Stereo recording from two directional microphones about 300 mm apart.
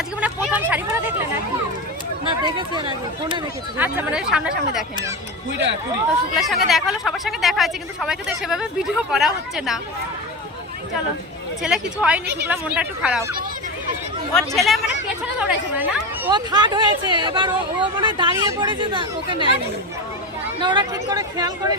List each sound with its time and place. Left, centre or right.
0.2 s chatter: centre
2.2 s speech: centre
3.8 s a woman's voice: centre
6.3 s a woman's voice: centre
11.6 s a woman's voice: centre
14.3 s a woman's voice: centre
20.6 s a woman's voice: centre